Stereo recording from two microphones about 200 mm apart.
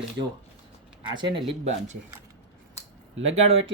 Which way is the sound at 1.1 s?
25° right (ahead or behind).